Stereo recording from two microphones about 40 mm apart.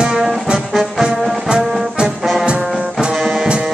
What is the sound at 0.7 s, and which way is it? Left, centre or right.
Music, centre.